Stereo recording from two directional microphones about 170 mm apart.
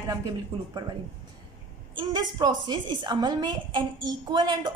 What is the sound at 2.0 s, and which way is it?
A woman's voice, 25° right (ahead or behind).